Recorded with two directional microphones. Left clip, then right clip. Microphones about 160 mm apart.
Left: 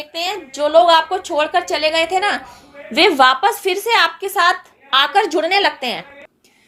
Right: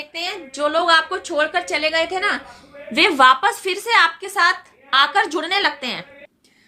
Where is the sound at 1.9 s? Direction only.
25° left (ahead or behind).